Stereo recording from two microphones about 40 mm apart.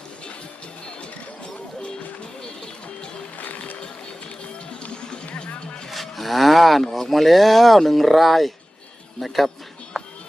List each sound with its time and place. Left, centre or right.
1.8 s music: left
3.3 s music: left
4.7 s music: left
5.9 s speech: centre
10.0 s music: centre